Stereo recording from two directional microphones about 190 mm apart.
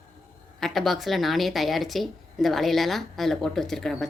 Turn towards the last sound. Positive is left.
turn(degrees=0)  # may be behind; listen again after turning